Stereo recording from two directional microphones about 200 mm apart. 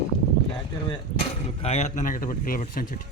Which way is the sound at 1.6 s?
30° left (ahead or behind).